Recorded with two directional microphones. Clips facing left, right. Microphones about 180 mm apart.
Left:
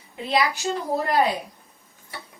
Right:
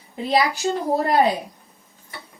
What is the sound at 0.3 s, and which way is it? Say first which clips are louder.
A woman's voice: right 3 dB; 35° right (ahead or behind).